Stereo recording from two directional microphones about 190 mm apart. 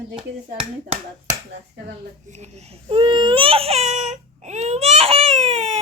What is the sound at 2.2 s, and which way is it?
Speech, 35° right (ahead or behind).